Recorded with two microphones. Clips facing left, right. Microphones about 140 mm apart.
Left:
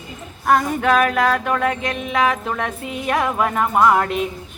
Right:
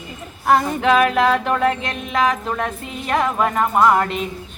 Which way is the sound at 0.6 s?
10° left (ahead or behind).